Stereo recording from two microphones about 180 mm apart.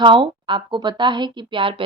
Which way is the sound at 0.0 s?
25° right (ahead or behind).